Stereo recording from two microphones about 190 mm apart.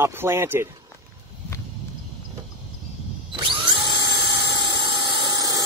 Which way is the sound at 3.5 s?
25° right (ahead or behind).